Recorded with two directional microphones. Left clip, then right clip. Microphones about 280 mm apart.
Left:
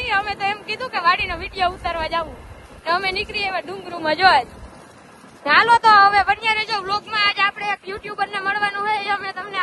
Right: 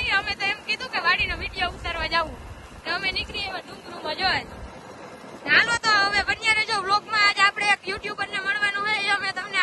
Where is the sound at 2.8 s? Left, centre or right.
Centre.